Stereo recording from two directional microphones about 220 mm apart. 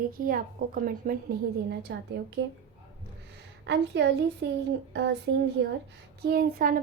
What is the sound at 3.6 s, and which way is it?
A woman's voice, 50° right (ahead or behind).